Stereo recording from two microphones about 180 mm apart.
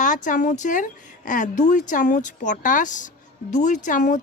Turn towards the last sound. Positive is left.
turn(degrees=45)  # may be behind; listen again after turning